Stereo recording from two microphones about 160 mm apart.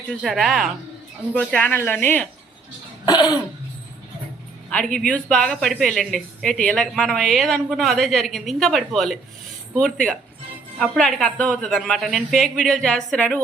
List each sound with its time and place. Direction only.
0.1 s speech: centre (ahead or behind)
3.1 s cough: 25° left (ahead or behind)
4.7 s speech: 10° left (ahead or behind)